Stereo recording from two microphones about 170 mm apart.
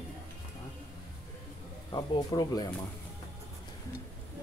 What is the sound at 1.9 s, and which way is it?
Speech, 20° left (ahead or behind).